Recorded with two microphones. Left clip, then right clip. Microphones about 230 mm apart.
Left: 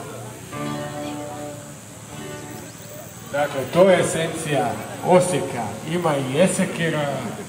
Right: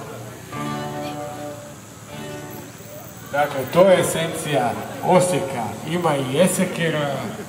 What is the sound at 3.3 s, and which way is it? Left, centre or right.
A man's voice, right.